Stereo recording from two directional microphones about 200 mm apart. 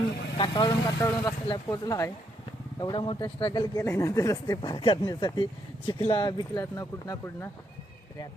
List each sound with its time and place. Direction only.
0.3 s speech: 25° left (ahead or behind)